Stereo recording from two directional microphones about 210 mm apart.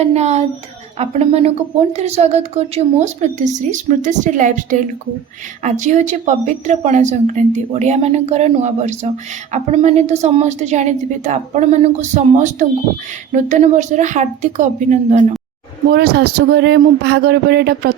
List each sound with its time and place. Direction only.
0.0 s a woman's voice: 30° right (ahead or behind)
15.9 s speech: 45° right (ahead or behind)